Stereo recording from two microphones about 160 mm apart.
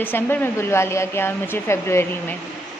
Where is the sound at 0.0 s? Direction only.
15° left (ahead or behind).